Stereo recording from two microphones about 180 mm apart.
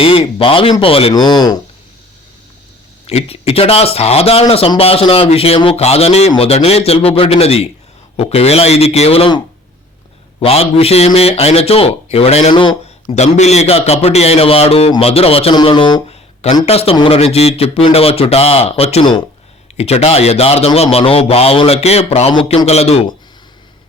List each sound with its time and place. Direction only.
0.0 s speech: 30° left (ahead or behind)
3.1 s a man's voice: 35° left (ahead or behind)
10.4 s a man's voice: 35° left (ahead or behind)